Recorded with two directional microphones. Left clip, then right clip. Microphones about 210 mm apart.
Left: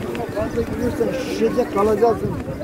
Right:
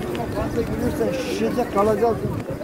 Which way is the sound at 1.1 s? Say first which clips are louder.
Left 3 dB; 20° right (ahead or behind).